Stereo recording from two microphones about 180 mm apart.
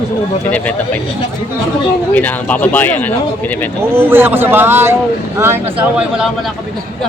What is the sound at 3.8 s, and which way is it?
A man's voice, 10° right (ahead or behind).